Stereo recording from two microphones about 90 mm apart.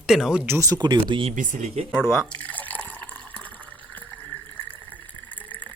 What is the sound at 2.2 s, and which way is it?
Water, 15° left (ahead or behind).